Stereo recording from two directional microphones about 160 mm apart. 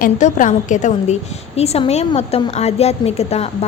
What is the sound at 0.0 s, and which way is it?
A woman's voice, 50° left (ahead or behind).